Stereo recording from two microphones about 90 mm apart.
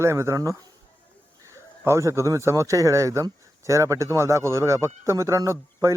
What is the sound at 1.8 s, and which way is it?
A man's voice, 30° right (ahead or behind).